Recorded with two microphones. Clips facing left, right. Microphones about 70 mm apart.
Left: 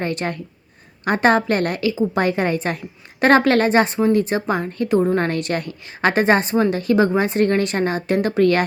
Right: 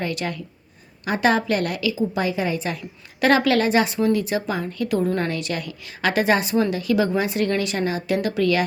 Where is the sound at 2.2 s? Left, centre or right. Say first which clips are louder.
Left 4 dB; left.